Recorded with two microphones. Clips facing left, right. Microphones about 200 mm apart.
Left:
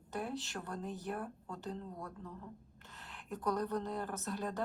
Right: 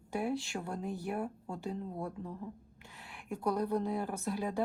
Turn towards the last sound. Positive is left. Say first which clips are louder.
# right 4 dB
turn(degrees=-10)  # may be behind; listen again after turning